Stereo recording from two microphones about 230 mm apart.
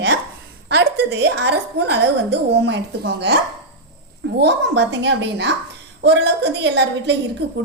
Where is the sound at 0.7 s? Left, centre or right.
Right.